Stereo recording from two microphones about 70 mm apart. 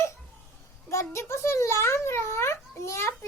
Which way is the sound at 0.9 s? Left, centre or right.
Left.